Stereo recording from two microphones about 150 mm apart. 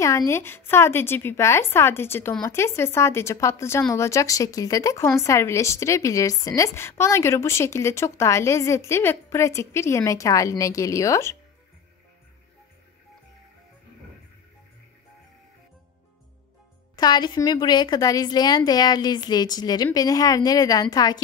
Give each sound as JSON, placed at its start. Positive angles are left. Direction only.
{"t": 0.0, "sound": "a woman's voice", "side_deg": 20}
{"t": 16.9, "sound": "a woman's voice", "side_deg": 30}